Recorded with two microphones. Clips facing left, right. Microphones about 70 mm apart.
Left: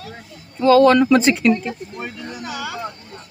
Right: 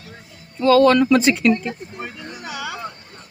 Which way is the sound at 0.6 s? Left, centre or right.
Centre.